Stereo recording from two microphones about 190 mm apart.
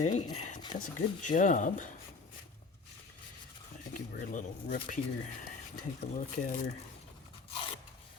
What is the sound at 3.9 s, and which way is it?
Speech, 45° left (ahead or behind).